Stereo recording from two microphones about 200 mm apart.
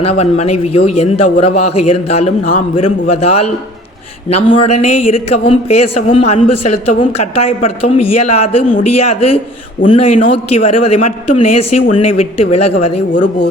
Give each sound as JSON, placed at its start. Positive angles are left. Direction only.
{"t": 0.0, "sound": "speech", "side_deg": 30}
{"t": 4.4, "sound": "speech", "side_deg": 30}